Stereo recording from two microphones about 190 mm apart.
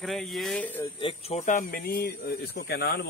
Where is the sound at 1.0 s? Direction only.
30° left (ahead or behind); by 3.0 s 55° left (ahead or behind).